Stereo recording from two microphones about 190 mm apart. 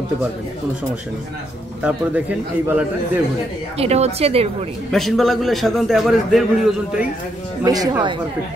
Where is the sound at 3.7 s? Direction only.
35° right (ahead or behind).